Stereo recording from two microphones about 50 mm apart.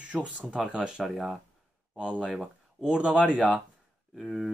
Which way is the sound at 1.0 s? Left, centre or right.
Centre.